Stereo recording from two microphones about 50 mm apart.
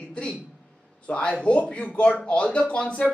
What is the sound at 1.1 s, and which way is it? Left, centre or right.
Speech, left.